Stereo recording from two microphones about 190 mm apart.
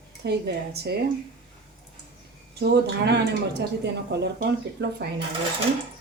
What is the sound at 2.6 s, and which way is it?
Speech, 65° right (ahead or behind).